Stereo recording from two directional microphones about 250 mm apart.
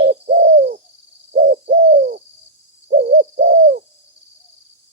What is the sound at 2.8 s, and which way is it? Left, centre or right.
Owl, right.